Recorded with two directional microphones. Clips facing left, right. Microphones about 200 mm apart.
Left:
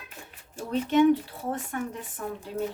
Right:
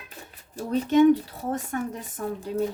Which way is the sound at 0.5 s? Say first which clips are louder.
Right 3 dB; 40° right (ahead or behind).